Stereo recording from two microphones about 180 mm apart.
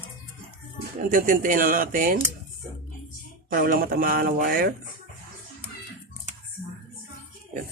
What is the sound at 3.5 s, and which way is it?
Speech, 50° right (ahead or behind).